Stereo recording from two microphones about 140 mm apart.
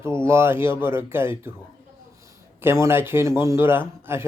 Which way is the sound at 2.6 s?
20° right (ahead or behind).